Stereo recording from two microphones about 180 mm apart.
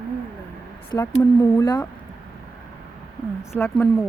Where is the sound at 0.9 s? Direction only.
10° left (ahead or behind).